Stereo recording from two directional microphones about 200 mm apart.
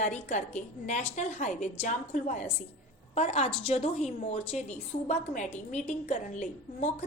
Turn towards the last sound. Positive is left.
turn(degrees=35)  # may be behind; listen again after turning